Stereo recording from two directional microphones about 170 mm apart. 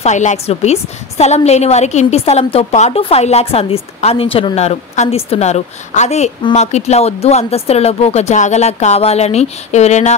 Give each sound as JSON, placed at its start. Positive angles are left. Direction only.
{"t": 0.0, "sound": "a woman's voice", "side_deg": 45}